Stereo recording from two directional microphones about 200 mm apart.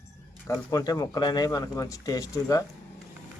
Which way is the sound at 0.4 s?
15° left (ahead or behind).